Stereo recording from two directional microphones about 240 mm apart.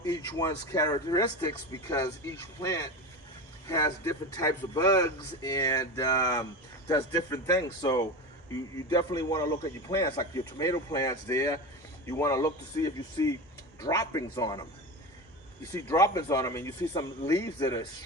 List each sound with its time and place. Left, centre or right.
0.0 s a man's voice: centre
15.7 s a man's voice: centre